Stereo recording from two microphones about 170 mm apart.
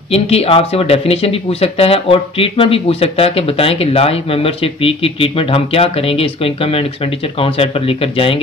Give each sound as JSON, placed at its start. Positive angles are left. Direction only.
{"t": 0.1, "sound": "speech", "side_deg": 35}